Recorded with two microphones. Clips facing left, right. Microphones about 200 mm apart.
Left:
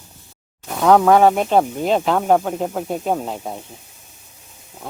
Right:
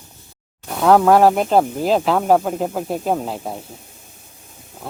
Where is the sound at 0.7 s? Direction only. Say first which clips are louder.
Even; centre (ahead or behind).